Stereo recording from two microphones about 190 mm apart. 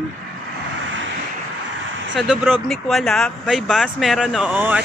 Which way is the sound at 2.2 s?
5° right (ahead or behind).